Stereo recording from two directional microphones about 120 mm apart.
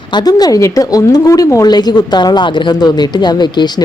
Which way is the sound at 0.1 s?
35° left (ahead or behind).